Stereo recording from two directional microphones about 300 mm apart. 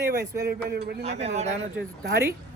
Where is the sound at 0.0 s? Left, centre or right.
Right.